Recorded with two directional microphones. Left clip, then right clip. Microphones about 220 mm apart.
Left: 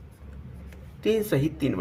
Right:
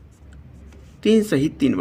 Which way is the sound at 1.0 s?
40° right (ahead or behind).